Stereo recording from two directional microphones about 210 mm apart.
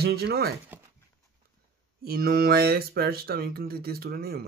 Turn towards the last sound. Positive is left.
turn(degrees=-45)  # may be behind; listen again after turning